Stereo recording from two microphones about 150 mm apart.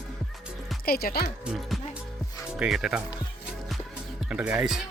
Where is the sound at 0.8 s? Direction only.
90° left.